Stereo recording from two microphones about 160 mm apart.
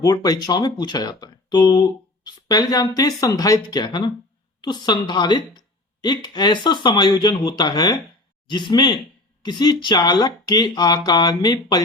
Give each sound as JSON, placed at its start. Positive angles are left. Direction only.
{"t": 0.0, "sound": "speech", "side_deg": 25}